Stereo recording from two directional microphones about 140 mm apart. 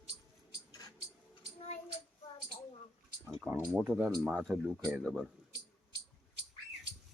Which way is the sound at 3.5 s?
15° right (ahead or behind).